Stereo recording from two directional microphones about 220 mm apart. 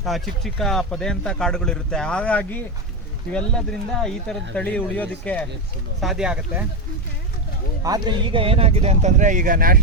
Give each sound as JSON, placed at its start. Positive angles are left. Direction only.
{"t": 0.0, "sound": "speech", "side_deg": 0}
{"t": 7.9, "sound": "speech", "side_deg": -20}